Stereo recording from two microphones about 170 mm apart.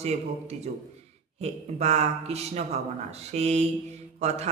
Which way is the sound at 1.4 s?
40° right (ahead or behind).